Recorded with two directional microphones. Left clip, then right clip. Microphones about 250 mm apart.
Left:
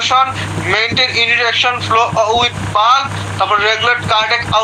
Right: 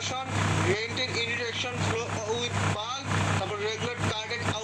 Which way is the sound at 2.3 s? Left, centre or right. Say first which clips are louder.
Left 17 dB; centre.